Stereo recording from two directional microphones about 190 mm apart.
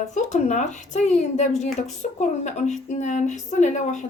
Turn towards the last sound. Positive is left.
turn(degrees=40)  # may be behind; listen again after turning